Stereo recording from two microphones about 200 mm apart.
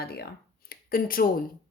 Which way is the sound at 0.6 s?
45° left (ahead or behind).